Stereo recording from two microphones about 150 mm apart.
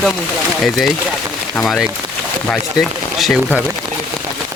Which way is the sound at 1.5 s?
5° left (ahead or behind).